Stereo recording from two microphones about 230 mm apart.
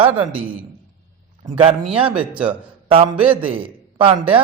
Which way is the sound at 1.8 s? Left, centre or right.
Centre.